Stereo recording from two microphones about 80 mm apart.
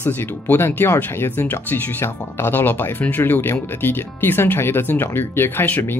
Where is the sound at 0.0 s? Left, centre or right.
Left.